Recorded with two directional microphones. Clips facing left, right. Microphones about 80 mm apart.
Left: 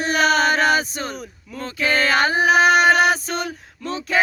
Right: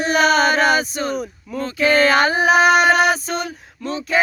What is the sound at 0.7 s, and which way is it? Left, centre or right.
Speech, left.